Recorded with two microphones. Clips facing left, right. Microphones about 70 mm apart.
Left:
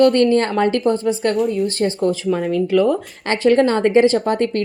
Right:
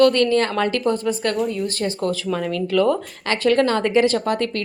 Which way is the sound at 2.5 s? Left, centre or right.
Centre.